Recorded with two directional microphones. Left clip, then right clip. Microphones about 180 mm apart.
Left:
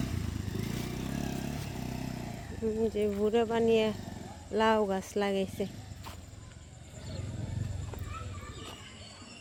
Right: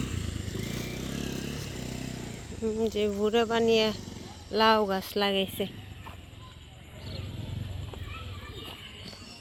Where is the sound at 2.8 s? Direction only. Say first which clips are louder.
Right 2 dB; centre (ahead or behind).